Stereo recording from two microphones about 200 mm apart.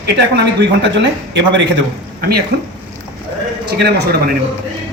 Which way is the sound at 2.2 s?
50° right (ahead or behind).